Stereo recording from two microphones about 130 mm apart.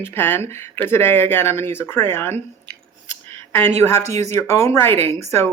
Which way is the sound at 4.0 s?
55° right (ahead or behind).